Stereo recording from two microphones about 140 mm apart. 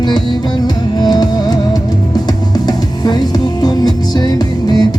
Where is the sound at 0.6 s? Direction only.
30° left (ahead or behind).